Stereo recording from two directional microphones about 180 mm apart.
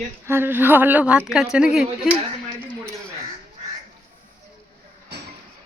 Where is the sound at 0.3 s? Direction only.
10° right (ahead or behind).